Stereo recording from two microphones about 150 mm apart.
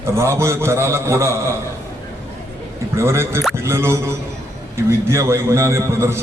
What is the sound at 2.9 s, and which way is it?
A man's voice, 15° right (ahead or behind).